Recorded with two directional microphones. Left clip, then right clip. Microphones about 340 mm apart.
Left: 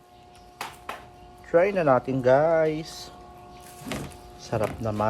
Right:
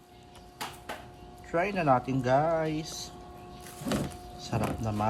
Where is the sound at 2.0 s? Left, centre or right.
Left.